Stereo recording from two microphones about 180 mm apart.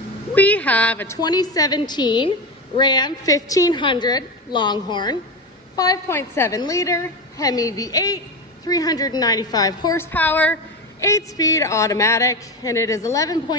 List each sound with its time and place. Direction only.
0.3 s a woman's voice: 10° left (ahead or behind)
10.1 s a woman's voice: 10° left (ahead or behind)